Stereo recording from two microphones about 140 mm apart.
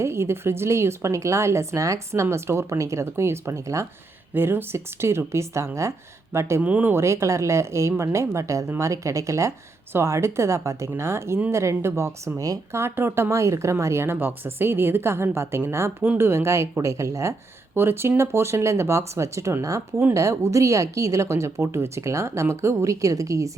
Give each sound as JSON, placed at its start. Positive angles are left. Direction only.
{"t": 0.0, "sound": "speech", "side_deg": -20}